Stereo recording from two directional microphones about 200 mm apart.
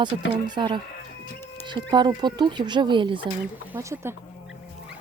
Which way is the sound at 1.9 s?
20° right (ahead or behind).